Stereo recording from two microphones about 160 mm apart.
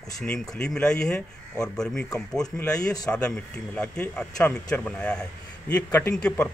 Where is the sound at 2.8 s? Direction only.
20° left (ahead or behind).